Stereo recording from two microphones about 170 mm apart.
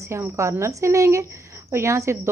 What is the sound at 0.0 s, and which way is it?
A woman's voice, 15° right (ahead or behind).